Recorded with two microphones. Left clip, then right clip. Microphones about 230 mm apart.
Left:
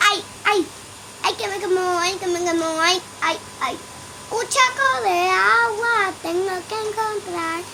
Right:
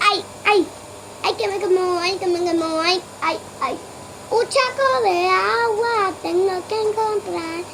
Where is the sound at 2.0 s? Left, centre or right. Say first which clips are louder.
Right 1 dB; centre.